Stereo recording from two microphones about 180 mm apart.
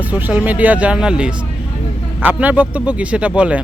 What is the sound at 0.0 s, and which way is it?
Speech, 10° right (ahead or behind).